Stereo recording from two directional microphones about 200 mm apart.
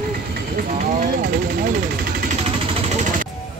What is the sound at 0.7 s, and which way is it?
Vehicle, 40° right (ahead or behind).